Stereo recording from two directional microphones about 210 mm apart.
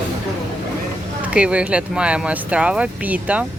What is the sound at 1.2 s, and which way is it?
Speech, 5° right (ahead or behind).